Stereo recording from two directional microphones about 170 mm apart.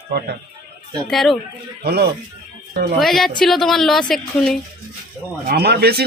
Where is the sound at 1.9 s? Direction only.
65° right (ahead or behind).